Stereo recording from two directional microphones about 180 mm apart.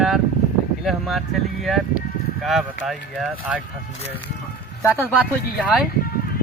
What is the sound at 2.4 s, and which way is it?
Speech, centre (ahead or behind).